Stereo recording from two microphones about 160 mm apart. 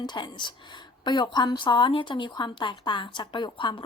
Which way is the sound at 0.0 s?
30° left (ahead or behind).